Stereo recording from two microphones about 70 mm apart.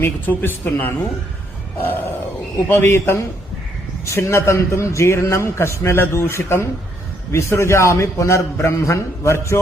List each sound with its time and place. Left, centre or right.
0.0 s a man's voice: left
4.0 s a man's voice: left